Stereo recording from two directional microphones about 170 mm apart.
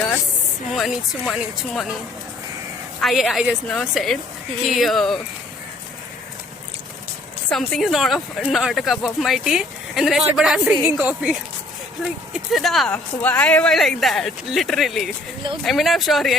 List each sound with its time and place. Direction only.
0.7 s speech: centre (ahead or behind)
3.0 s speech: centre (ahead or behind)
7.5 s speech: centre (ahead or behind)